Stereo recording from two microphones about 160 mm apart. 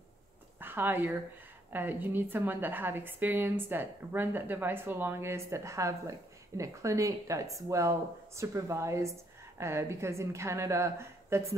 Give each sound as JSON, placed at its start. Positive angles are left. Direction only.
{"t": 0.6, "sound": "a woman's voice", "side_deg": -10}